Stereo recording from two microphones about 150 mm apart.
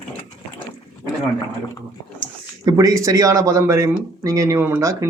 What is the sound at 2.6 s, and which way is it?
Speech, 25° right (ahead or behind).